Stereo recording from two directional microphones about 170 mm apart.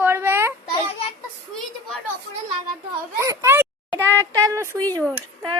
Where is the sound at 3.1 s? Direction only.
15° right (ahead or behind).